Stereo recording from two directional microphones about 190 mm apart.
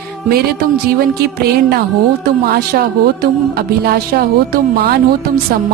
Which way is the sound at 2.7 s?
55° right (ahead or behind).